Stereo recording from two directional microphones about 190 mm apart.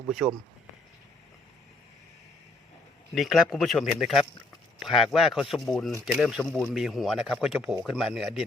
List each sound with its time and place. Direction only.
0.1 s speech: centre (ahead or behind)
3.1 s speech: centre (ahead or behind)